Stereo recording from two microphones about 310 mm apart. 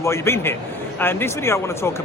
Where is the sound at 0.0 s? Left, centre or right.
Centre.